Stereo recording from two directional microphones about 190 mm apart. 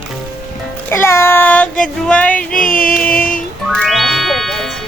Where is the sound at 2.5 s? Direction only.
50° left (ahead or behind).